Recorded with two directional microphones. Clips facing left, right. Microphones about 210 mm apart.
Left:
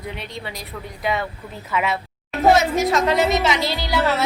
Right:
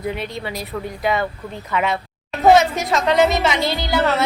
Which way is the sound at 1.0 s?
Centre (ahead or behind).